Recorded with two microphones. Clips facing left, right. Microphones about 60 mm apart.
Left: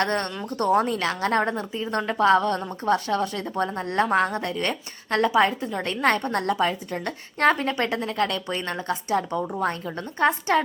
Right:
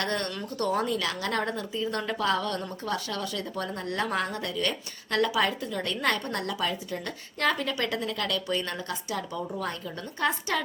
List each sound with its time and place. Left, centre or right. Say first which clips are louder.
0.0 s a woman's voice: left 5 dB; left